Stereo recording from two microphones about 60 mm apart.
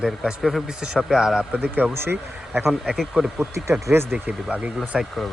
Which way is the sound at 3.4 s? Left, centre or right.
Right.